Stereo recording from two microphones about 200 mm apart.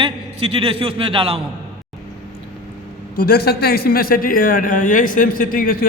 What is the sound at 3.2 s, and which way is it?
A man's voice, 50° left (ahead or behind).